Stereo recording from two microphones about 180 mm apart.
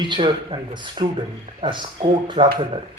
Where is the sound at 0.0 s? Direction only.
25° right (ahead or behind).